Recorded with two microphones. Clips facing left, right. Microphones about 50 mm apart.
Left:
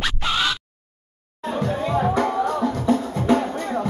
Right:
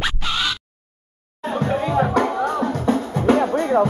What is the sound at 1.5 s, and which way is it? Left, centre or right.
Music, right.